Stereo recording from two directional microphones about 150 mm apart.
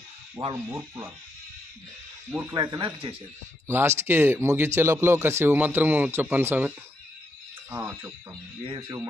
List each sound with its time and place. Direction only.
0.5 s speech: 20° right (ahead or behind)
2.4 s speech: 20° right (ahead or behind)
3.7 s speech: 15° right (ahead or behind)
8.6 s speech: 30° right (ahead or behind)